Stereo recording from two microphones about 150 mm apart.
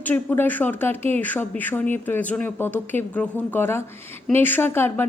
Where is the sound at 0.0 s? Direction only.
10° left (ahead or behind).